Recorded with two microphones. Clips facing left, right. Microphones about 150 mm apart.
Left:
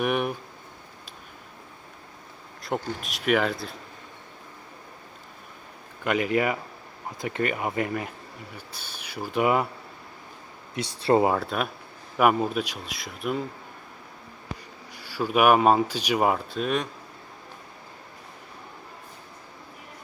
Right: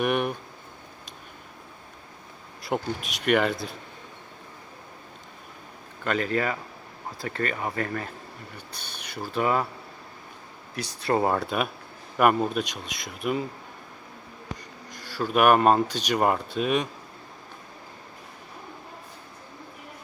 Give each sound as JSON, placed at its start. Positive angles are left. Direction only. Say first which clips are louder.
{"t": 0.0, "sound": "speech", "louder": "even", "side_deg": 0}
{"t": 2.6, "sound": "speech", "louder": "right 1 dB", "side_deg": 0}
{"t": 6.1, "sound": "speech", "louder": "left 2 dB", "side_deg": 15}
{"t": 10.8, "sound": "speech", "louder": "left 4 dB", "side_deg": 25}
{"t": 11.2, "sound": "speech", "louder": "left 1 dB", "side_deg": 5}
{"t": 14.9, "sound": "speech", "louder": "even", "side_deg": 10}